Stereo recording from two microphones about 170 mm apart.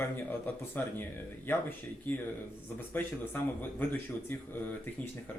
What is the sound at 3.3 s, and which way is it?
Speech, 10° left (ahead or behind).